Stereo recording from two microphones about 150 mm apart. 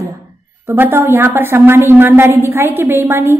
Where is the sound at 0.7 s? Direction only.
15° right (ahead or behind).